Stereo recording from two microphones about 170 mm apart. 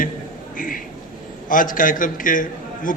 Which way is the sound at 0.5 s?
55° left (ahead or behind).